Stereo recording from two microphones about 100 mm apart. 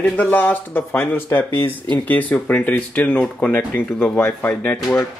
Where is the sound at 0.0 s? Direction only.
15° left (ahead or behind).